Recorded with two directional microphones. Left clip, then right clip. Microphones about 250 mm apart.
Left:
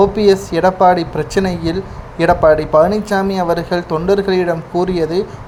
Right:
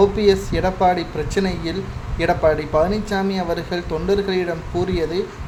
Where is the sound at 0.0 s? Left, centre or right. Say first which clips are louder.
Left 4 dB; centre.